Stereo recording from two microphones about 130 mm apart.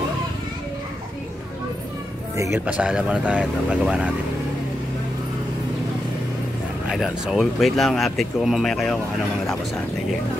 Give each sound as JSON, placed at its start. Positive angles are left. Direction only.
{"t": 2.3, "sound": "speech", "side_deg": -25}
{"t": 2.6, "sound": "speech", "side_deg": -10}
{"t": 6.9, "sound": "speech", "side_deg": 0}